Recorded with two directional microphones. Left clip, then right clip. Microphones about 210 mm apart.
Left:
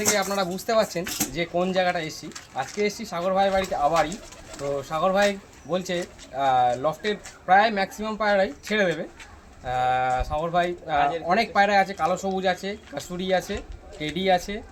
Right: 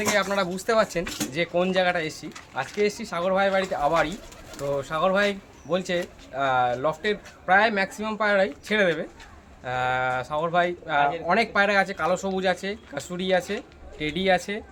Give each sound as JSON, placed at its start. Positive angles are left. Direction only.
{"t": 0.1, "sound": "speech", "side_deg": -5}